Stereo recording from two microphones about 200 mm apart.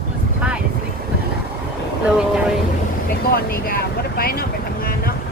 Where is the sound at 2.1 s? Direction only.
5° right (ahead or behind).